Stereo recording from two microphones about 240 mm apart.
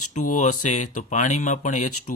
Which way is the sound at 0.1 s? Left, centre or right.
Left.